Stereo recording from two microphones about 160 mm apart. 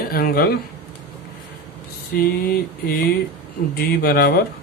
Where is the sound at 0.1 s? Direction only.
70° left (ahead or behind).